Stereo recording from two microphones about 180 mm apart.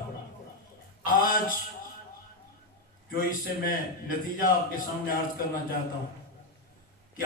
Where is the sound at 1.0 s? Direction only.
50° left (ahead or behind).